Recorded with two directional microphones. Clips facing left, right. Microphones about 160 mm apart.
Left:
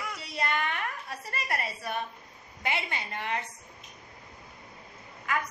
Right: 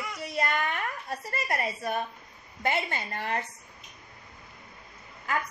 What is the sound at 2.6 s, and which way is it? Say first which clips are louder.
Speech: right 4 dB; 45° right (ahead or behind).